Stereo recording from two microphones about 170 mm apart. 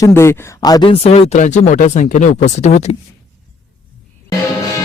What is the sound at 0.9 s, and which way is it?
Speech, 35° left (ahead or behind).